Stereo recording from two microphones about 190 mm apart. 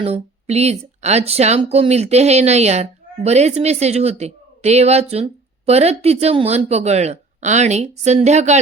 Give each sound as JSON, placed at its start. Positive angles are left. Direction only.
{"t": 0.0, "sound": "speech", "side_deg": -35}